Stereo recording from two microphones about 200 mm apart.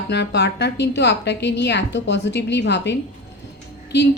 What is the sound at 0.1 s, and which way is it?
A woman's voice, 60° left (ahead or behind).